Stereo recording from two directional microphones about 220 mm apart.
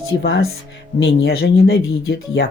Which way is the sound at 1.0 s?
45° left (ahead or behind).